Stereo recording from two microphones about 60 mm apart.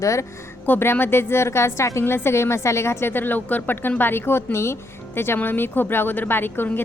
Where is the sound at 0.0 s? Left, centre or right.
Left.